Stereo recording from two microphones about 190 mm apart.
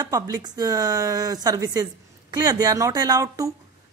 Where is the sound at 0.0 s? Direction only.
20° right (ahead or behind).